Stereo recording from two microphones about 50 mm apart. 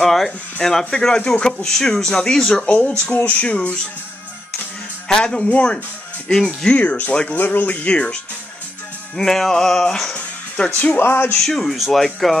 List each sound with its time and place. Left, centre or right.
0.0 s speech: centre; by 2.9 s left
3.1 s speech: left
3.4 s speech: left
5.0 s speech: centre
6.7 s speech: left
9.1 s speech: centre
10.1 s music: left
10.8 s speech: left
11.3 s speech: centre